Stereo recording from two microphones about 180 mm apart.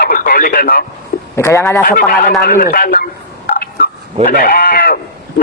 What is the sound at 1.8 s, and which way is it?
Speech, 55° left (ahead or behind).